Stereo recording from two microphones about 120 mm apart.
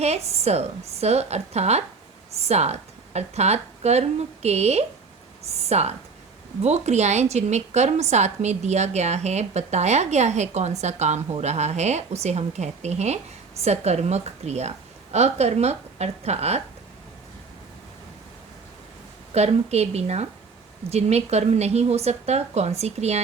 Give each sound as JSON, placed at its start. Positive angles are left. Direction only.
{"t": 0.0, "sound": "a woman's voice", "side_deg": -60}
{"t": 19.3, "sound": "a woman's voice", "side_deg": -60}